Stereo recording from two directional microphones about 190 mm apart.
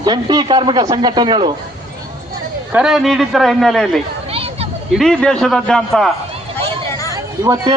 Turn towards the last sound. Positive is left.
turn(degrees=-20)  # may be behind; listen again after turning